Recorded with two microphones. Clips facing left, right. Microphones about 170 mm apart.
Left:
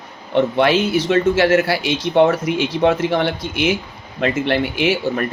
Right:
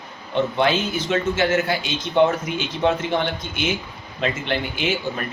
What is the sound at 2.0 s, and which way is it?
Speech, 75° left (ahead or behind).